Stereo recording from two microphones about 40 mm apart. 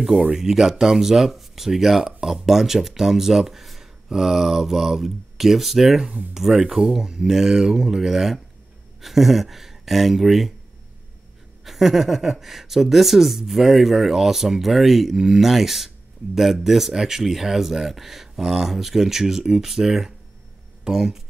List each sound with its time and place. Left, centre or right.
0.3 s speech: centre
11.6 s speech: centre